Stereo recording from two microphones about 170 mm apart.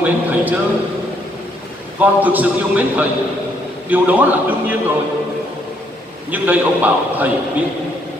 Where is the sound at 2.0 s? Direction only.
10° right (ahead or behind).